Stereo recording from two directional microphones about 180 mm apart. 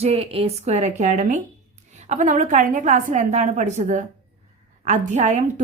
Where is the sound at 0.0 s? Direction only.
35° right (ahead or behind).